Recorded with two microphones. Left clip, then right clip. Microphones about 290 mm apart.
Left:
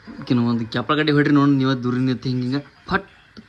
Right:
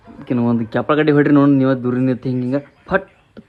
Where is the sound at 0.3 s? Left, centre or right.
Centre.